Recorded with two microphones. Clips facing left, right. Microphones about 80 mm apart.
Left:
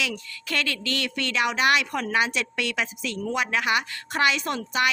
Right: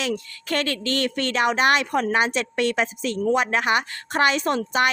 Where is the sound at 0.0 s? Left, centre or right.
Right.